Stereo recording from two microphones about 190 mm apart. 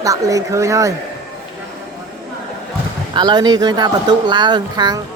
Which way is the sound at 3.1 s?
20° right (ahead or behind).